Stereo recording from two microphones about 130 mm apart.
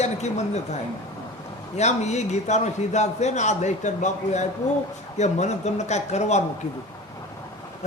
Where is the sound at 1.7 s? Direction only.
60° left (ahead or behind).